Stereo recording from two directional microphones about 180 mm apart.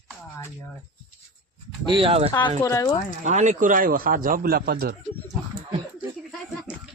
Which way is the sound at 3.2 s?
40° right (ahead or behind).